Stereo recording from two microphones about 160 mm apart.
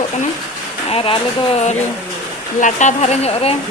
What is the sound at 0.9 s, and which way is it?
Speech, 35° left (ahead or behind).